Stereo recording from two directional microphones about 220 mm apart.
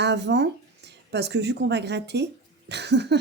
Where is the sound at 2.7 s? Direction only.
50° right (ahead or behind).